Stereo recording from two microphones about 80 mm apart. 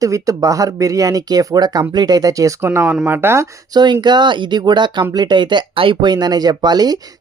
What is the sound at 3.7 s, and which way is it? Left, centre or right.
Speech, right.